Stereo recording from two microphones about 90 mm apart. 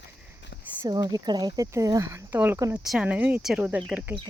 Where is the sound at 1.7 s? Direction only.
40° right (ahead or behind).